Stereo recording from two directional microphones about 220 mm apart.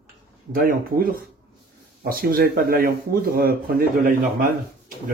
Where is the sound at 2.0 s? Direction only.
40° right (ahead or behind).